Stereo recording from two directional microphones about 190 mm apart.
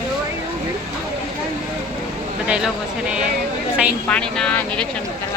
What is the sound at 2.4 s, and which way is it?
Speech, 5° right (ahead or behind).